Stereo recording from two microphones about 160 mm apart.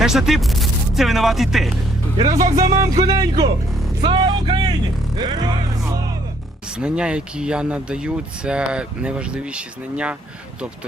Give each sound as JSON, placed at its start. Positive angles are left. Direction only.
{"t": 0.0, "sound": "speech", "side_deg": -5}
{"t": 2.2, "sound": "speech", "side_deg": -20}
{"t": 4.0, "sound": "music", "side_deg": -30}
{"t": 5.1, "sound": "speech", "side_deg": -25}
{"t": 6.7, "sound": "speech", "side_deg": -5}